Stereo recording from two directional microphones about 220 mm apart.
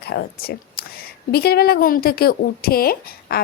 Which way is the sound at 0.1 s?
45° left (ahead or behind).